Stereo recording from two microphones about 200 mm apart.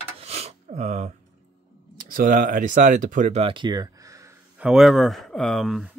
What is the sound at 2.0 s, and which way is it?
Speech, 45° right (ahead or behind).